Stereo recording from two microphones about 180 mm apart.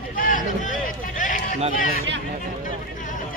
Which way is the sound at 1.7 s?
50° left (ahead or behind).